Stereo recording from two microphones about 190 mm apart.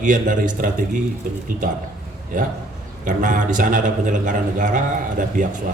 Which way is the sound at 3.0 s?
45° right (ahead or behind).